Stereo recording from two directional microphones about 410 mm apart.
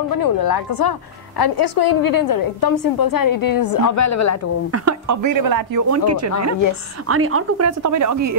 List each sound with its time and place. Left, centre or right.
0.1 s a woman's voice: left
4.6 s speech: right